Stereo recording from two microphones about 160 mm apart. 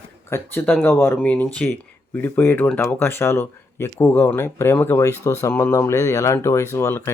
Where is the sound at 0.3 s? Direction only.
15° left (ahead or behind).